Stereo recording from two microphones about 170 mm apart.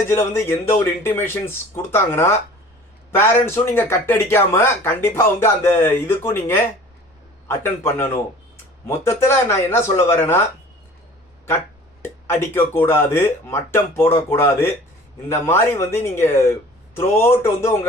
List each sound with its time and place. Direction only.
0.1 s speech: 15° left (ahead or behind)
12.0 s speech: 15° left (ahead or behind)